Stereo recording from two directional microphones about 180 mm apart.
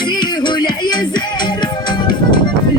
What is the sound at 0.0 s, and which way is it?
Music, 25° left (ahead or behind).